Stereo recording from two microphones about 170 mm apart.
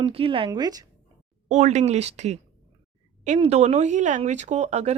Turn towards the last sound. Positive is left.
turn(degrees=-40)  # may be behind; listen again after turning